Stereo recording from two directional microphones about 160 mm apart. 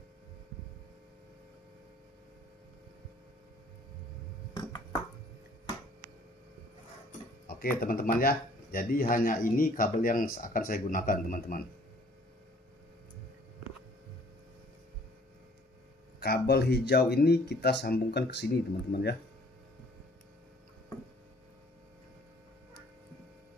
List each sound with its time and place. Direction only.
7.8 s speech: 65° left (ahead or behind)
16.2 s speech: 80° left